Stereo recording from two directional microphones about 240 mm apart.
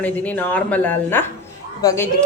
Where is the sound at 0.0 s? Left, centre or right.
Centre.